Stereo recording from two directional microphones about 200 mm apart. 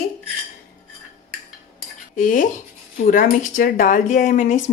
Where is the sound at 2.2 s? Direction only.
40° left (ahead or behind).